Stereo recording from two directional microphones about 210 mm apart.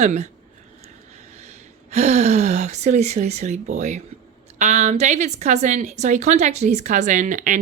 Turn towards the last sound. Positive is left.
turn(degrees=-35)  # may be behind; listen again after turning